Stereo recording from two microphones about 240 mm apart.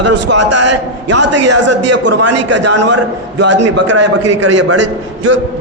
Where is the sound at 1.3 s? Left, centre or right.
Right.